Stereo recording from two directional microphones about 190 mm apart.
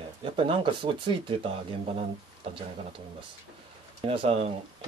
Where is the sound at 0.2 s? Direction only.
25° right (ahead or behind).